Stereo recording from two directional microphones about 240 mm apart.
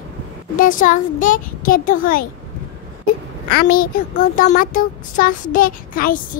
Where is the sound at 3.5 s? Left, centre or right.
Left.